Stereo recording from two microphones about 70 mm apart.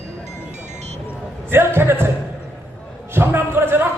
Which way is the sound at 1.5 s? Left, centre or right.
Right.